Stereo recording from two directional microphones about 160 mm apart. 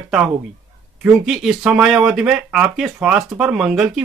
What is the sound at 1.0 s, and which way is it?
Speech, centre (ahead or behind).